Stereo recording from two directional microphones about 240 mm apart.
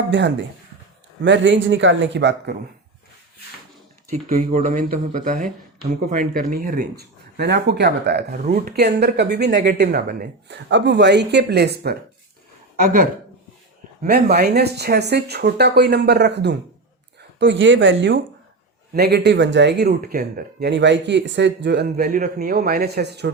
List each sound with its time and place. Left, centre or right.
0.1 s speech: right
4.1 s speech: right